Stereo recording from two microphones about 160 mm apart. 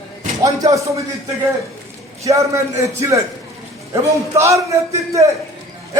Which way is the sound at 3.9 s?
20° right (ahead or behind).